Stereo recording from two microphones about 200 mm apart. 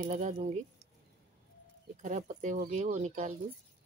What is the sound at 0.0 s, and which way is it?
Speech, 35° right (ahead or behind).